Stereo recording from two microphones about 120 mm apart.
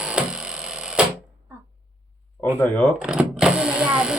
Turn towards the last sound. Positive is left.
turn(degrees=-10)  # may be behind; listen again after turning